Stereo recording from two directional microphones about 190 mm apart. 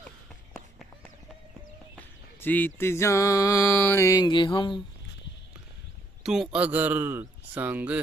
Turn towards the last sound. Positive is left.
turn(degrees=-10)  # may be behind; listen again after turning